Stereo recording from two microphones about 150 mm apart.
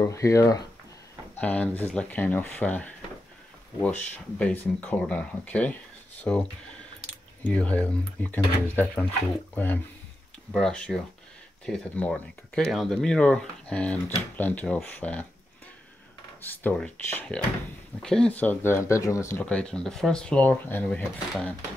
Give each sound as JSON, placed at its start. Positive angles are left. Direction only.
{"t": 0.0, "sound": "speech", "side_deg": 20}
{"t": 1.3, "sound": "speech", "side_deg": 10}
{"t": 7.4, "sound": "speech", "side_deg": 10}
{"t": 16.4, "sound": "speech", "side_deg": 10}